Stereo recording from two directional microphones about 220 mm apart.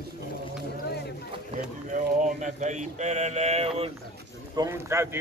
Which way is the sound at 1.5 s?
35° right (ahead or behind).